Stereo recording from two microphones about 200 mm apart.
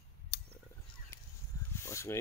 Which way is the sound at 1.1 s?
15° left (ahead or behind).